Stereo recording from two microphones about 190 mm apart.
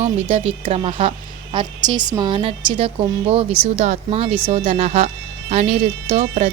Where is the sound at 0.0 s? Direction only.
30° right (ahead or behind).